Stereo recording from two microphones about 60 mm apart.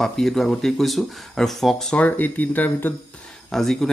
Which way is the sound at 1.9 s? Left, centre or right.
Left.